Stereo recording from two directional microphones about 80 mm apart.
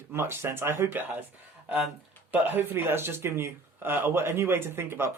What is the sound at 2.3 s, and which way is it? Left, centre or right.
Speech, right.